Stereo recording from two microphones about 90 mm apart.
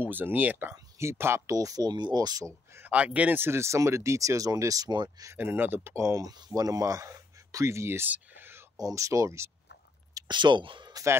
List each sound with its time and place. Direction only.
0.0 s speech: 20° right (ahead or behind); by 2.4 s 45° right (ahead or behind)
2.7 s speech: 20° right (ahead or behind); by 5.2 s 50° right (ahead or behind)
5.4 s speech: 25° right (ahead or behind)
8.1 s whispering: 25° right (ahead or behind)
8.7 s speech: 40° right (ahead or behind)
10.2 s speech: 60° right (ahead or behind)